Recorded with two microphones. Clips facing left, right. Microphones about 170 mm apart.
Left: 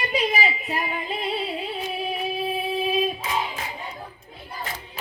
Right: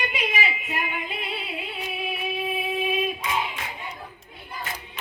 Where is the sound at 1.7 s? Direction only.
35° left (ahead or behind).